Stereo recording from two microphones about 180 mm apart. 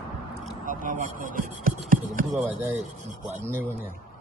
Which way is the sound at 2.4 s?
10° right (ahead or behind).